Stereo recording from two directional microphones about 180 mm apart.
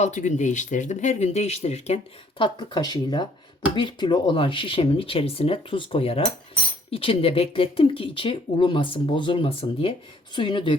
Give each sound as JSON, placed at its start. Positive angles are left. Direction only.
{"t": 0.0, "sound": "speech", "side_deg": 40}
{"t": 2.4, "sound": "speech", "side_deg": 25}